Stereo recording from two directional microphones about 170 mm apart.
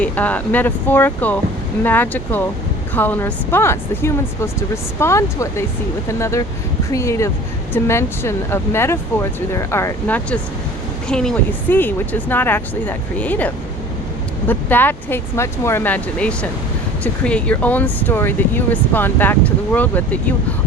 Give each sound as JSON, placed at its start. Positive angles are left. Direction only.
{"t": 0.0, "sound": "speech", "side_deg": 10}